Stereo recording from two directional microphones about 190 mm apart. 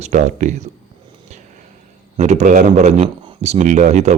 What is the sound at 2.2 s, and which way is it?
Speech, 35° right (ahead or behind).